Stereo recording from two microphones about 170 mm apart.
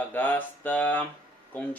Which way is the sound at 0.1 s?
10° left (ahead or behind).